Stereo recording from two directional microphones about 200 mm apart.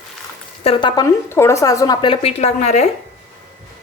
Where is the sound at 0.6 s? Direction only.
25° left (ahead or behind).